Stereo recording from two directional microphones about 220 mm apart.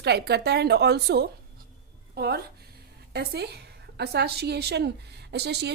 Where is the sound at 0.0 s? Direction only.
50° right (ahead or behind).